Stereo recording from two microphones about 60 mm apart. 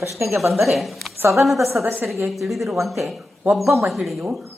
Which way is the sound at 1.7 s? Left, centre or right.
Right.